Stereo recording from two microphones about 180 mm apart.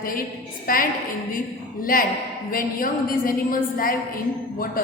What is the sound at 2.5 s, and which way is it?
A woman's voice, 50° left (ahead or behind).